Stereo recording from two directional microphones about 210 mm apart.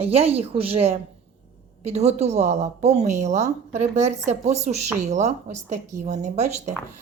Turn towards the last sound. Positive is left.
turn(degrees=-35)  # may be behind; listen again after turning